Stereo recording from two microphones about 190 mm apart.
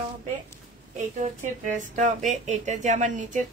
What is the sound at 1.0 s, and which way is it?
Speech, 40° right (ahead or behind).